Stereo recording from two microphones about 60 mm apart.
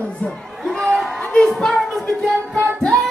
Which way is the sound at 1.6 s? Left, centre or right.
Centre.